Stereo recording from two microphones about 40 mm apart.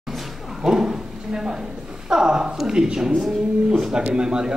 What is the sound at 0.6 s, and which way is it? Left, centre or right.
A woman's voice, centre.